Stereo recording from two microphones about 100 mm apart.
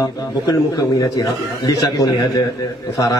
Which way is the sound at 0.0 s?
40° left (ahead or behind).